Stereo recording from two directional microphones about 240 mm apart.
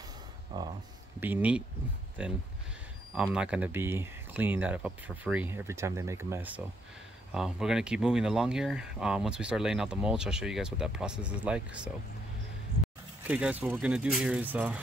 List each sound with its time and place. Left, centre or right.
0.5 s a sound: centre
1.2 s speech: centre
13.3 s speech: centre